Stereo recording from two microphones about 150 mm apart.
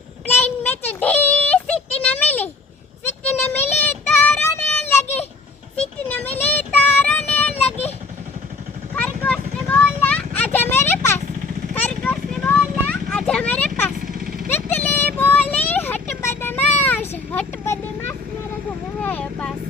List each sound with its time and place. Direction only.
0.3 s a sound: 15° left (ahead or behind)
3.8 s child singing: 10° left (ahead or behind)
6.3 s child singing: 10° left (ahead or behind)
9.0 s vehicle: 10° left (ahead or behind)
14.0 s vehicle: 75° right (ahead or behind)
14.5 s a sound: 10° left (ahead or behind)
18.9 s vehicle: 10° left (ahead or behind)